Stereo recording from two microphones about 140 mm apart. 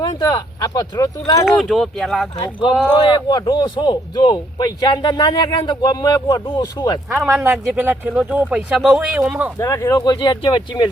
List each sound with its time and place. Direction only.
0.2 s speech: 25° left (ahead or behind)
1.5 s speech: centre (ahead or behind)
2.4 s speech: 35° left (ahead or behind)
7.1 s speech: 5° right (ahead or behind)
9.6 s speech: 20° left (ahead or behind)